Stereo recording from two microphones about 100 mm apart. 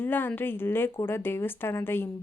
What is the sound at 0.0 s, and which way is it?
A woman's voice, 20° left (ahead or behind).